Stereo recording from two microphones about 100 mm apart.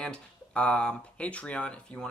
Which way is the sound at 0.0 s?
10° left (ahead or behind).